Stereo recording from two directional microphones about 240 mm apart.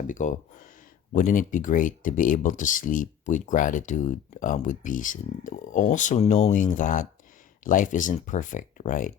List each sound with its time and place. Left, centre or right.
0.1 s speech: left